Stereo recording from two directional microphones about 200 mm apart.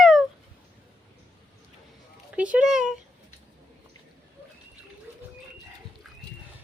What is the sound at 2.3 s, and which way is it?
Speech, 5° right (ahead or behind).